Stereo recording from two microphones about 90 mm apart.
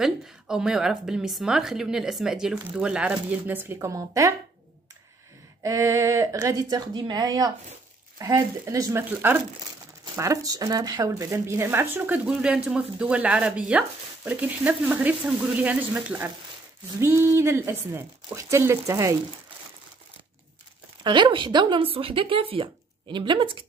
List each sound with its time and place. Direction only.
0.0 s a woman's voice: 5° right (ahead or behind); by 3.9 s 25° right (ahead or behind)
3.9 s speech: 40° right (ahead or behind)
5.6 s speech: 35° right (ahead or behind)
10.1 s speech: 35° right (ahead or behind)
11.2 s speech: 35° right (ahead or behind)
12.3 s a woman's voice: 10° right (ahead or behind); by 19.1 s 30° right (ahead or behind)
21.0 s speech: 60° right (ahead or behind)